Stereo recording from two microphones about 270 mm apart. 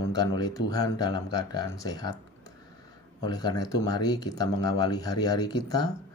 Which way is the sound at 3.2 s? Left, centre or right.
Centre.